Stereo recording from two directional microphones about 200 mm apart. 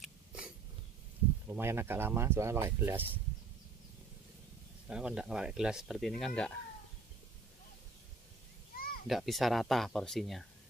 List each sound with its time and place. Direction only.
0.0 s a sound: 5° right (ahead or behind)
1.5 s speech: 10° right (ahead or behind)
4.8 s speech: 5° right (ahead or behind)
8.7 s children playing: 45° left (ahead or behind)
9.0 s speech: centre (ahead or behind)